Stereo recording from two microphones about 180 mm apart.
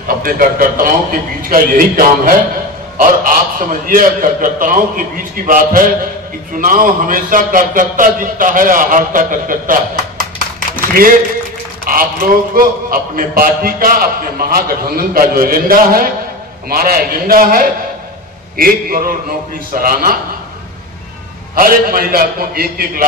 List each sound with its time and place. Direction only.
0.2 s a man's voice: 50° right (ahead or behind)
11.9 s a man's voice: 55° right (ahead or behind)
21.5 s a man's voice: 50° right (ahead or behind)